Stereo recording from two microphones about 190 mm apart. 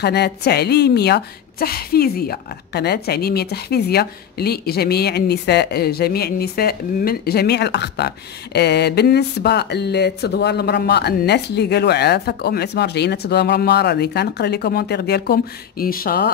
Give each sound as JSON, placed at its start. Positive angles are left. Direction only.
{"t": 0.0, "sound": "a woman's voice", "side_deg": 60}